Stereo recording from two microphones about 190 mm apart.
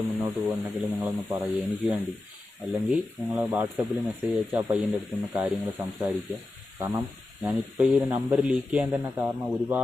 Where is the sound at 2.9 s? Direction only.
10° right (ahead or behind).